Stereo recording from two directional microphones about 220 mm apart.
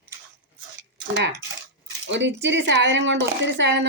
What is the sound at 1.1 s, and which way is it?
Speech, 50° right (ahead or behind).